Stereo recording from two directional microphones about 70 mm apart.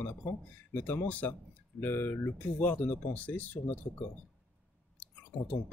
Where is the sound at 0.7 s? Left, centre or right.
Left.